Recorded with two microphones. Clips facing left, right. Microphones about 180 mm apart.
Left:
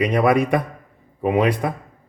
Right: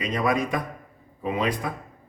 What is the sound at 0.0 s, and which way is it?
A man's voice, 65° left (ahead or behind).